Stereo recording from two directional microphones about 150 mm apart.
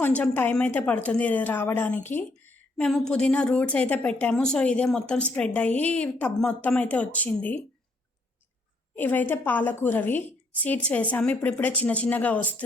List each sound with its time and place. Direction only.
0.0 s speech: 10° left (ahead or behind)
9.0 s speech: 10° left (ahead or behind)